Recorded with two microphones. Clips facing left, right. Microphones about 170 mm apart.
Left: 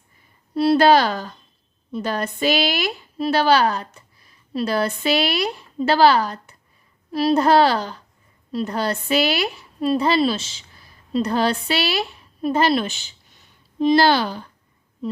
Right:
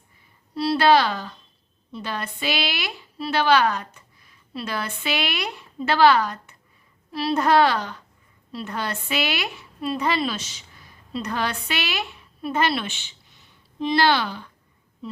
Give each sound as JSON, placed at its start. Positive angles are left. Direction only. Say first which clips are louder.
{"t": 0.5, "sound": "a woman's voice", "louder": "left 4 dB", "side_deg": 50}